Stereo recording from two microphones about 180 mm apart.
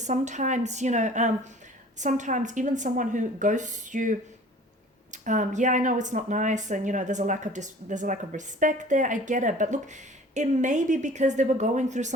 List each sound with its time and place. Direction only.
0.0 s a woman's voice: 40° right (ahead or behind)